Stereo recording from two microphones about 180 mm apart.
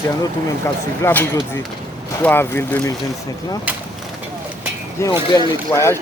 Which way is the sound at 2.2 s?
10° left (ahead or behind).